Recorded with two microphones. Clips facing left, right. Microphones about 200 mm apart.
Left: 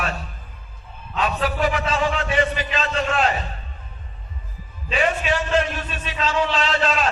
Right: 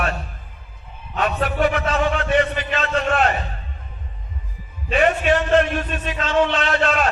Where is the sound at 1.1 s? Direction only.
55° right (ahead or behind).